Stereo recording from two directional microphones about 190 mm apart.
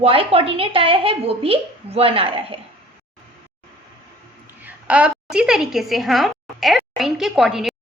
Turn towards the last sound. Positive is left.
turn(degrees=0)  # may be behind; listen again after turning